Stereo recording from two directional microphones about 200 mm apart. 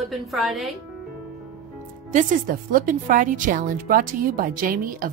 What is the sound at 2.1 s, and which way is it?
A woman's voice, 45° right (ahead or behind).